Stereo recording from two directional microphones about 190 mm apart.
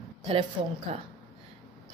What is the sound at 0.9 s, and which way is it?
Speech, 35° right (ahead or behind).